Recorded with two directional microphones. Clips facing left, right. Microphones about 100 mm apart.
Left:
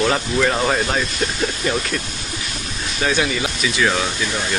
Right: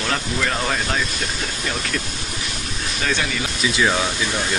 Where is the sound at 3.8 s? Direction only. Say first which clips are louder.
Left 1 dB; 10° right (ahead or behind).